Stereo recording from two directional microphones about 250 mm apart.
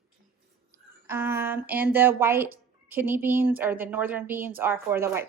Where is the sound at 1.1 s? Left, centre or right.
Centre.